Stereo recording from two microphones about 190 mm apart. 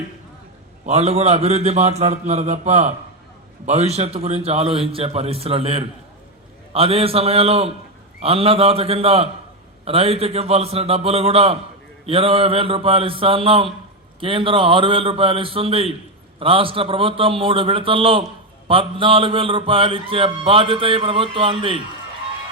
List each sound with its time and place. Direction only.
0.9 s a man's voice: 35° right (ahead or behind)
12.0 s mantra: 30° right (ahead or behind)